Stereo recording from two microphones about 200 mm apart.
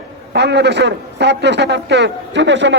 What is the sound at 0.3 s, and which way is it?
A man's voice, 60° right (ahead or behind).